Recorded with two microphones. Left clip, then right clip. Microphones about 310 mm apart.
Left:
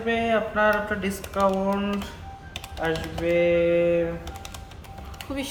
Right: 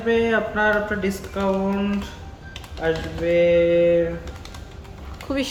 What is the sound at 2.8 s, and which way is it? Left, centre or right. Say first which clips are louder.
Speech: right 3 dB; centre.